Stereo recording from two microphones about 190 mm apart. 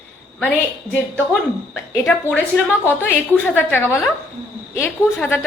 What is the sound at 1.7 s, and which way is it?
A woman's voice, centre (ahead or behind).